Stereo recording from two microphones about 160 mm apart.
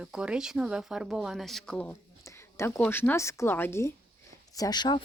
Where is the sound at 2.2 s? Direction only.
15° left (ahead or behind).